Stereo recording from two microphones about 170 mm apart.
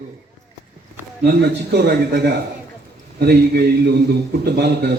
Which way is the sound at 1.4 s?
75° right (ahead or behind).